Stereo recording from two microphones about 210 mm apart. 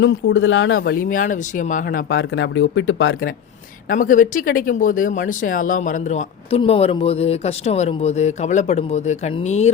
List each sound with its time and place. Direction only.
0.0 s speech: 65° left (ahead or behind)
0.8 s speech: 45° left (ahead or behind)
2.1 s speech: 65° left (ahead or behind)
3.8 s speech: 40° left (ahead or behind)